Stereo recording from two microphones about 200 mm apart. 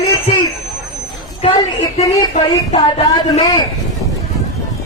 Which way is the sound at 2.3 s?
30° left (ahead or behind).